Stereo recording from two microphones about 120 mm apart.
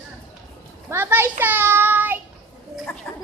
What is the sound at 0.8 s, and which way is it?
A child's voice, 15° right (ahead or behind).